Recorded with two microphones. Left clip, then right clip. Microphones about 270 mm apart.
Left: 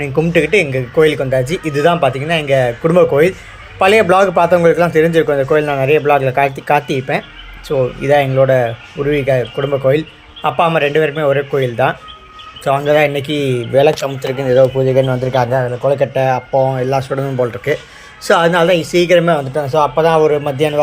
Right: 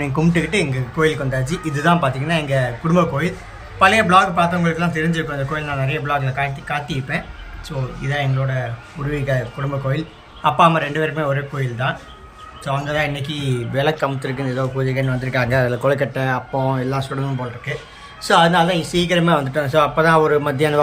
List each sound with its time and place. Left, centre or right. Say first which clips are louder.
0.0 s a man's voice: left 7 dB; centre
15.5 s speech: left 3 dB; centre
16.0 s a man's voice: left 7 dB; centre
18.3 s a man's voice: left 4 dB; centre
19.5 s speech: left 2 dB; centre
20.0 s a man's voice: left 4 dB; centre